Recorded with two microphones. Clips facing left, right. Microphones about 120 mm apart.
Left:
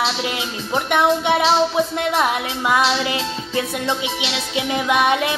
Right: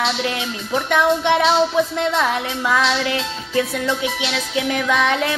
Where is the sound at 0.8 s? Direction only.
15° left (ahead or behind).